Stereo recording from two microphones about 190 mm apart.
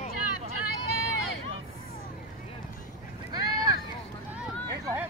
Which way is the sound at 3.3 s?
20° right (ahead or behind).